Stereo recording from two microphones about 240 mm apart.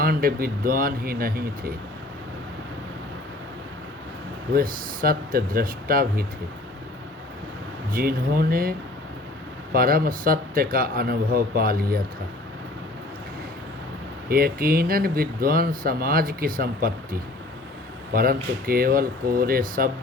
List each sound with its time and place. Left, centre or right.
0.0 s speech: right
4.5 s speech: right
7.9 s speech: right
9.7 s speech: right
14.3 s speech: right